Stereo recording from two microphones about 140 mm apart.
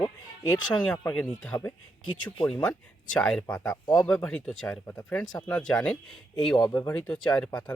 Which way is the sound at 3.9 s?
5° left (ahead or behind).